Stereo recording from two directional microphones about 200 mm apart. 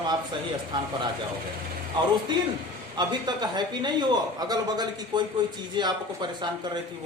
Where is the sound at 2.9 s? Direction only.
20° right (ahead or behind).